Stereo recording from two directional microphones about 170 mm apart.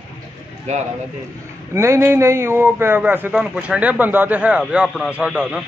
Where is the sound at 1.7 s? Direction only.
15° right (ahead or behind).